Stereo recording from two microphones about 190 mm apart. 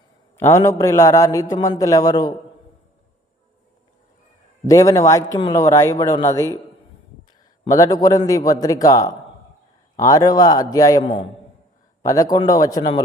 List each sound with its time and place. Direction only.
0.3 s a man's voice: 15° left (ahead or behind)
4.7 s a man's voice: 15° left (ahead or behind)
7.7 s a man's voice: 20° left (ahead or behind)